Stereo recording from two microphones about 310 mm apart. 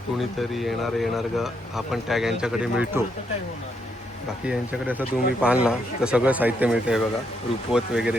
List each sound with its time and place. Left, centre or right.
0.2 s speech: centre
4.4 s speech: centre